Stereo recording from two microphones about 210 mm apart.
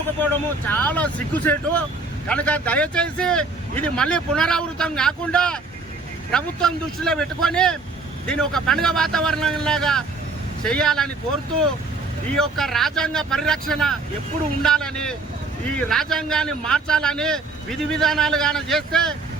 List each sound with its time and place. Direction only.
0.7 s speech: 10° left (ahead or behind)
12.4 s speech: centre (ahead or behind)